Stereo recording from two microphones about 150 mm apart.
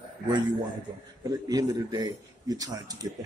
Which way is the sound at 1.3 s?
25° right (ahead or behind).